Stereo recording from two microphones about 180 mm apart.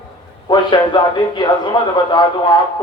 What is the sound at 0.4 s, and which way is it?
A man's voice, 25° left (ahead or behind).